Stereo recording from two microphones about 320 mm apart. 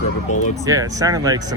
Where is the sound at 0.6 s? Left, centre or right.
Centre.